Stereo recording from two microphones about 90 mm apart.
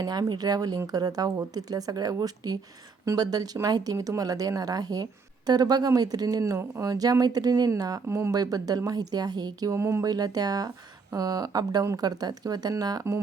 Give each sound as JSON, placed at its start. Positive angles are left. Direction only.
{"t": 0.0, "sound": "speech", "side_deg": -45}
{"t": 8.0, "sound": "speech", "side_deg": -30}
{"t": 8.3, "sound": "speech", "side_deg": -45}
{"t": 9.7, "sound": "speech", "side_deg": -30}
{"t": 10.1, "sound": "speech", "side_deg": -45}